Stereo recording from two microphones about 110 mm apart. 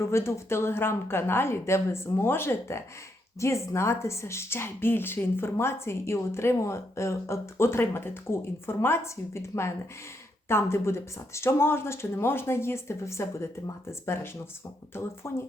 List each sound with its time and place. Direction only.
0.0 s speech: 25° left (ahead or behind)